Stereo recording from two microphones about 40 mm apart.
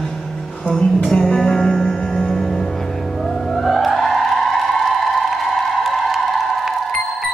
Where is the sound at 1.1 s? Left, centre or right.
Centre.